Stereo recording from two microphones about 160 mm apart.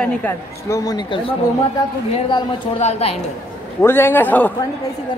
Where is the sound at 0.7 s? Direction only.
25° left (ahead or behind).